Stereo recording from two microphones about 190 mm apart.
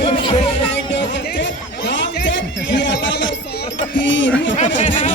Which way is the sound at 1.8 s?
70° left (ahead or behind).